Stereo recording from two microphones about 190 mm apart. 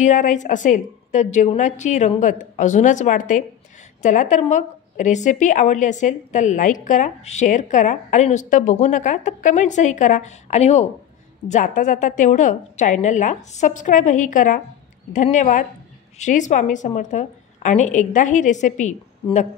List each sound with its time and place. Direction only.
0.0 s a woman's voice: 40° left (ahead or behind)